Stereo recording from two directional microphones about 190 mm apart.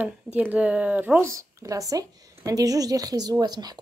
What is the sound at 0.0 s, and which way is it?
Speech, 10° right (ahead or behind).